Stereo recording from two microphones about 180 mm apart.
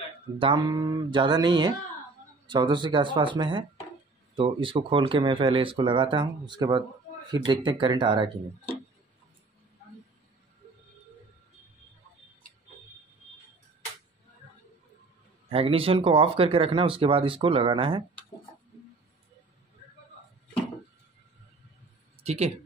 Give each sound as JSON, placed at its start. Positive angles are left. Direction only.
{"t": 0.4, "sound": "speech", "side_deg": -25}
{"t": 15.5, "sound": "speech", "side_deg": -30}
{"t": 22.2, "sound": "speech", "side_deg": -35}